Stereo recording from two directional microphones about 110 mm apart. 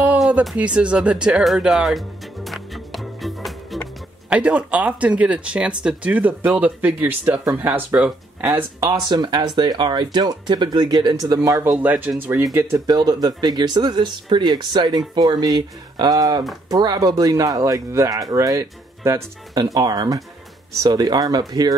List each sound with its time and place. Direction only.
0.3 s music: 10° right (ahead or behind)
4.3 s speech: 10° right (ahead or behind)
9.1 s speech: 40° right (ahead or behind)
11.6 s speech: 15° right (ahead or behind)
12.5 s speech: 35° right (ahead or behind)